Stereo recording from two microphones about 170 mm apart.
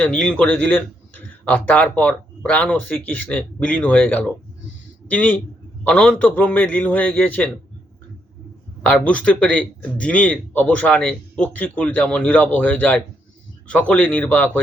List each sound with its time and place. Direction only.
0.0 s speech: 5° left (ahead or behind)
8.8 s speech: 5° left (ahead or behind)